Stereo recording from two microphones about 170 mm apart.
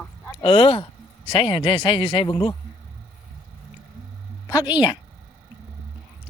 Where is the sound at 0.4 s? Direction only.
30° left (ahead or behind).